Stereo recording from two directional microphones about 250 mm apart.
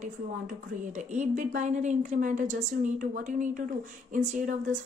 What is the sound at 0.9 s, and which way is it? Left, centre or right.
A woman's voice, right.